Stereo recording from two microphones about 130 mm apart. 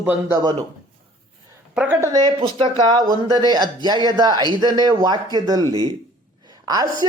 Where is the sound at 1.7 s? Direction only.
10° right (ahead or behind).